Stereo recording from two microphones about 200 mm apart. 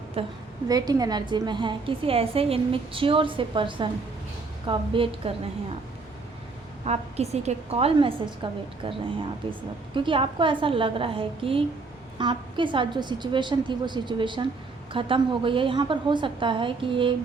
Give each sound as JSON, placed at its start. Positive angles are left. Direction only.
{"t": 0.2, "sound": "a woman's voice", "side_deg": -30}
{"t": 6.8, "sound": "a woman's voice", "side_deg": -35}